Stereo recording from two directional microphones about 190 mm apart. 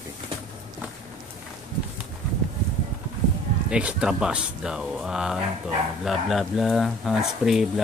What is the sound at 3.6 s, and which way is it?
Speech, 5° right (ahead or behind).